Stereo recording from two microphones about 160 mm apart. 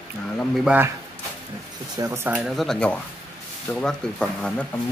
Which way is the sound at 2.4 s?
Centre (ahead or behind).